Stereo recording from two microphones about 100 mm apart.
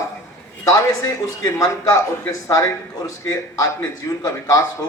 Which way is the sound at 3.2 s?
35° left (ahead or behind).